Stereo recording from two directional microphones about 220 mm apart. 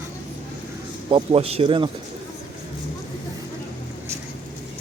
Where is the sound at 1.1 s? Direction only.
25° right (ahead or behind).